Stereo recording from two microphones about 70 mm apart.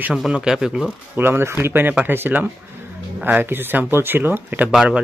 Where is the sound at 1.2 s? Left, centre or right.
Right.